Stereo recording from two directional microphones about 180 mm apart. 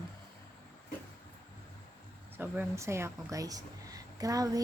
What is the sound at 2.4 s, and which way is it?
Speech, 15° right (ahead or behind).